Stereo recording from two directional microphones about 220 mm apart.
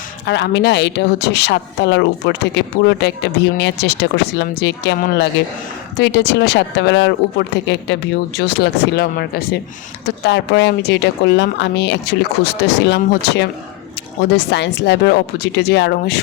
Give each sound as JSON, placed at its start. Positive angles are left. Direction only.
{"t": 0.3, "sound": "speech", "side_deg": 50}